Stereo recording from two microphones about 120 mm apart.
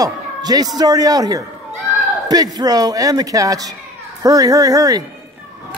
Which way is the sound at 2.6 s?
30° right (ahead or behind).